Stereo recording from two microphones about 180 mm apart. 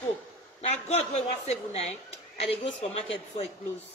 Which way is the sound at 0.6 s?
40° left (ahead or behind).